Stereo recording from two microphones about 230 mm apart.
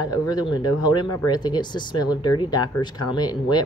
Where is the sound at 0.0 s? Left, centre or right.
Centre.